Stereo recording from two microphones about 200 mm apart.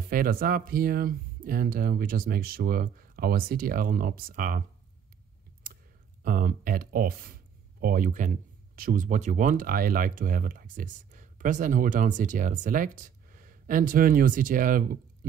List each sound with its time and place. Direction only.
0.1 s speech: 45° right (ahead or behind)
6.2 s speech: 45° right (ahead or behind)